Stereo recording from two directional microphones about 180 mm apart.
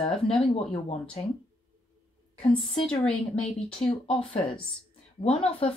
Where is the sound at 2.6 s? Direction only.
30° left (ahead or behind).